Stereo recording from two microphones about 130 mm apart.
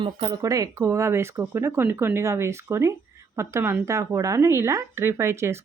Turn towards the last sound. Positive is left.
turn(degrees=-20)  # may be behind; listen again after turning